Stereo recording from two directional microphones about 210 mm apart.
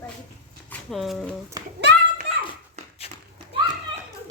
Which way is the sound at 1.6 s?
20° right (ahead or behind).